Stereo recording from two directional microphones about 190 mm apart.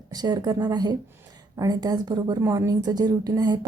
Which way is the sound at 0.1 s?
20° right (ahead or behind).